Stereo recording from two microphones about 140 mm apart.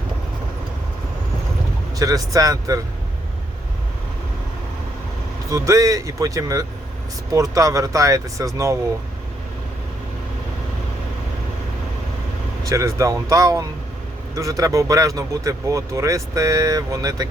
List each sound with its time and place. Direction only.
2.0 s speech: 25° right (ahead or behind)
5.5 s speech: 25° right (ahead or behind)
12.6 s speech: 20° right (ahead or behind)